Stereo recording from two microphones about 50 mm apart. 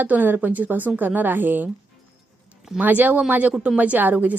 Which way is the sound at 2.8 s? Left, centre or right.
Right.